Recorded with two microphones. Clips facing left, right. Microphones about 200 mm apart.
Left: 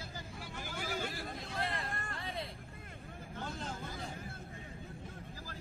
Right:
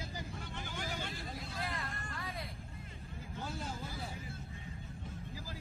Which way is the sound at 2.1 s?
25° left (ahead or behind).